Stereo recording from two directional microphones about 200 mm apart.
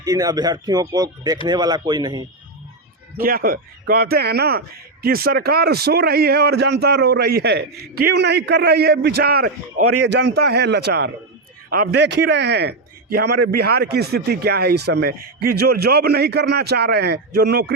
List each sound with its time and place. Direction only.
0.0 s speech: 15° right (ahead or behind)
3.2 s a man's voice: 45° right (ahead or behind)